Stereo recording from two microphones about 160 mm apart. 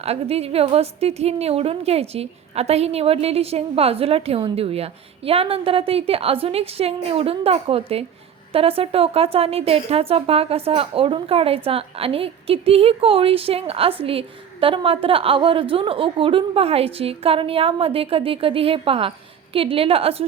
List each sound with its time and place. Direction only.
0.0 s speech: 40° right (ahead or behind)